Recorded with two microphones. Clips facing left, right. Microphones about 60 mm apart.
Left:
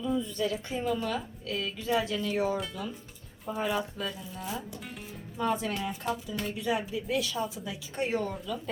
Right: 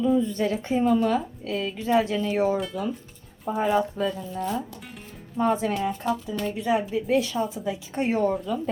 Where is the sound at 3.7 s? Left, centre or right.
Right.